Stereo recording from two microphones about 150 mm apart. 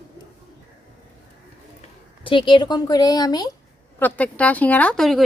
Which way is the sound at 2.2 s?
35° left (ahead or behind).